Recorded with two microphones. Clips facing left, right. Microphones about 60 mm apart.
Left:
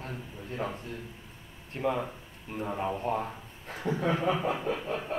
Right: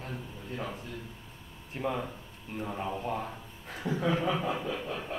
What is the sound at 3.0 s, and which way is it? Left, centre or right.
Speech, left.